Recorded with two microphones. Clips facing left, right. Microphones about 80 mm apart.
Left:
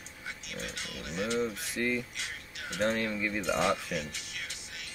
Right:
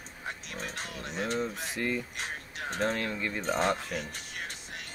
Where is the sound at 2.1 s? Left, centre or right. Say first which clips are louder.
Right 4 dB; right.